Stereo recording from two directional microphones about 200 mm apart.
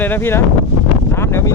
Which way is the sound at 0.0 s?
10° left (ahead or behind).